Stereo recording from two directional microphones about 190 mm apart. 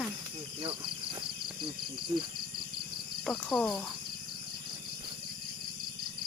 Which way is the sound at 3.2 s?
Centre (ahead or behind).